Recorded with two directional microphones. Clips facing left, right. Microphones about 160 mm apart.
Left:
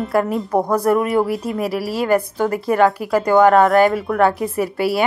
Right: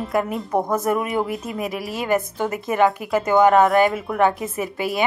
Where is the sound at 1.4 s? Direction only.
35° left (ahead or behind).